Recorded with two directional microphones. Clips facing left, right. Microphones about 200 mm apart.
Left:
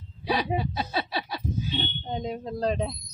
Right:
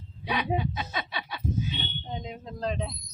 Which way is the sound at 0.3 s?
35° left (ahead or behind).